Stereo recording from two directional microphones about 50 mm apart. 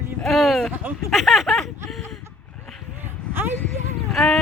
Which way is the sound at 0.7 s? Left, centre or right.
Right.